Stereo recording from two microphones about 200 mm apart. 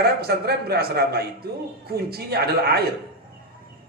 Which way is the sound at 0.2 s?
50° right (ahead or behind).